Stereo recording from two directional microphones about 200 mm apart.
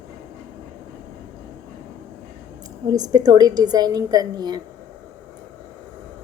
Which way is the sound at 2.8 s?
20° right (ahead or behind).